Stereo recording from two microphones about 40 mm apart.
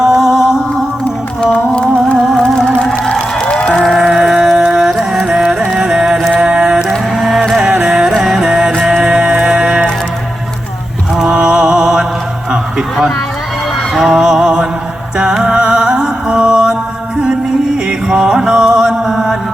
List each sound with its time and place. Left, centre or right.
0.0 s music: centre
1.5 s music: left
3.8 s livestock: centre
4.1 s music: centre
7.2 s music: centre
11.2 s music: right
13.9 s music: centre
18.1 s music: centre